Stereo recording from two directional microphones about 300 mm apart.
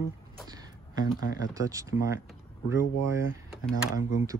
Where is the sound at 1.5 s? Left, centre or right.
Centre.